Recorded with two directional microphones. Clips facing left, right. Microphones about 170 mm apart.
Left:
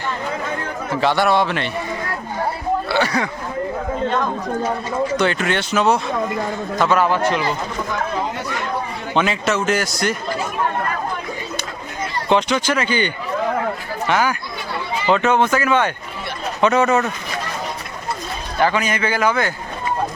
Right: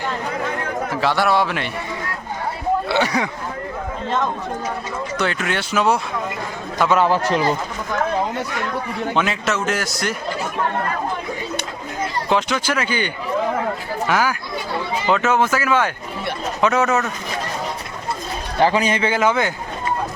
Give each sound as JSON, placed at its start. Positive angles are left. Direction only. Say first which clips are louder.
{"t": 1.0, "sound": "a man's voice", "louder": "left 2 dB", "side_deg": 0}
{"t": 2.9, "sound": "speech", "louder": "left 1 dB", "side_deg": -15}
{"t": 5.1, "sound": "a man's voice", "louder": "left 1 dB", "side_deg": -5}
{"t": 7.0, "sound": "a man's voice", "louder": "right 1 dB", "side_deg": -35}
{"t": 9.1, "sound": "a man's voice", "louder": "left 4 dB", "side_deg": 0}
{"t": 12.3, "sound": "speech", "louder": "left 4 dB", "side_deg": -5}
{"t": 14.1, "sound": "a man's voice", "louder": "left 1 dB", "side_deg": -5}
{"t": 18.5, "sound": "a man's voice", "louder": "right 2 dB", "side_deg": -30}